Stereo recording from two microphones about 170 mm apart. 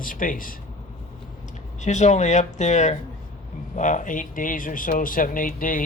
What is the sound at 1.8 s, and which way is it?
Speech, 45° left (ahead or behind).